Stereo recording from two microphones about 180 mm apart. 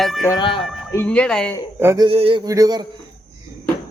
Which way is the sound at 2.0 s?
30° right (ahead or behind).